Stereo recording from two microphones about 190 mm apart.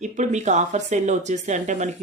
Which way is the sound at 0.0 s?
40° right (ahead or behind).